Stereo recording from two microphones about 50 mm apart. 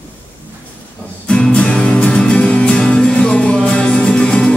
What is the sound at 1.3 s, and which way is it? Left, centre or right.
Music, centre.